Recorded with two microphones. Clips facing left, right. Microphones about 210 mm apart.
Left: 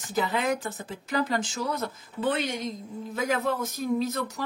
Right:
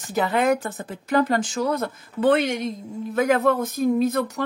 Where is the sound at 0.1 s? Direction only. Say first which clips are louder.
Right 6 dB; 60° right (ahead or behind).